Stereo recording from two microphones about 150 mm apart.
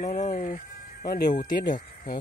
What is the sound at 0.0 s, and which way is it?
Music, 55° left (ahead or behind).